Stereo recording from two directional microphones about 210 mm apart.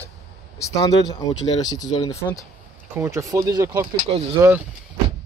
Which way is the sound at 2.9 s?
15° right (ahead or behind).